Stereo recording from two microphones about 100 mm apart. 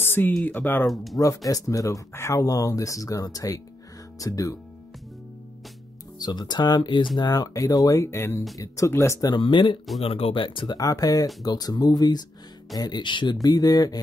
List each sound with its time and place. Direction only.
0.0 s a sound: 20° left (ahead or behind)
0.5 s speech: 20° left (ahead or behind)
0.8 s speech: centre (ahead or behind)
1.1 s speech: 35° left (ahead or behind)
6.1 s speech: 45° left (ahead or behind)
7.2 s speech: 40° left (ahead or behind)
9.3 s speech: 55° left (ahead or behind)
10.0 s speech: 75° left (ahead or behind); by 10.8 s 55° left (ahead or behind)
10.8 s speech: 40° left (ahead or behind)